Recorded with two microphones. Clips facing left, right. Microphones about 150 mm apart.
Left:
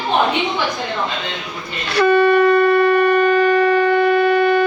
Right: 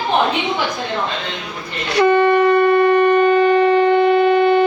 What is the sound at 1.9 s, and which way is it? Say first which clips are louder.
Shofar: even; 25° right (ahead or behind).